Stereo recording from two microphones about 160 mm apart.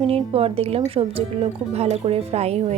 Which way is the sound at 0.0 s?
35° right (ahead or behind).